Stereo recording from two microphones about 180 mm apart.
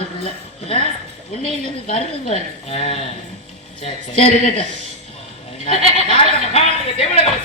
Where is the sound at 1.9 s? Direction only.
35° left (ahead or behind).